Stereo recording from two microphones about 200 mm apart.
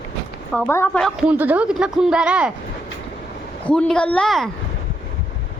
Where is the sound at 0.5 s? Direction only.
10° left (ahead or behind).